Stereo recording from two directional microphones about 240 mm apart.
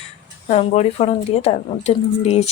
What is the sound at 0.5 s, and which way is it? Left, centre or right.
Speech, left.